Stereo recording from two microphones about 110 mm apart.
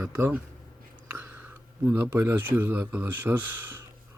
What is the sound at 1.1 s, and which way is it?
Speech, 15° right (ahead or behind).